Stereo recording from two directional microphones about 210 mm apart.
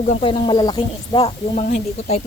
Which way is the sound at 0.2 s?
20° left (ahead or behind).